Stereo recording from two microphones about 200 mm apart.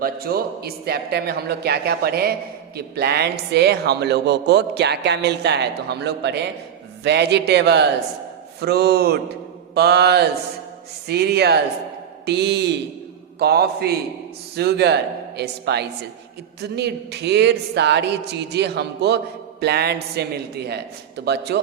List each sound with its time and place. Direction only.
0.0 s a man's voice: 50° right (ahead or behind)